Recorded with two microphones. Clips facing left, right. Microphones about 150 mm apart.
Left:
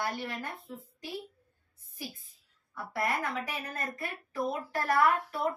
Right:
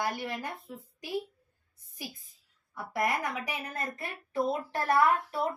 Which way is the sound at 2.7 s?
15° right (ahead or behind).